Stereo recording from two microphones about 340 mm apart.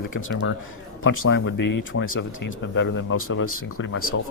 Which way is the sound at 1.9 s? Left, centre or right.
Left.